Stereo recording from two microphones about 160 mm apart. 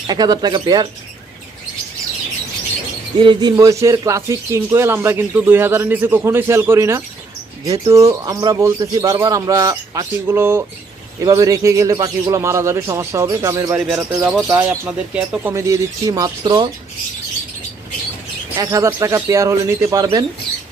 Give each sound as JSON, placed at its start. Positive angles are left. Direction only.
{"t": 0.1, "sound": "speech", "side_deg": -25}
{"t": 3.2, "sound": "speech", "side_deg": -30}
{"t": 13.7, "sound": "speech", "side_deg": -5}
{"t": 14.4, "sound": "speech", "side_deg": -15}
{"t": 15.5, "sound": "speech", "side_deg": -20}
{"t": 18.5, "sound": "speech", "side_deg": -20}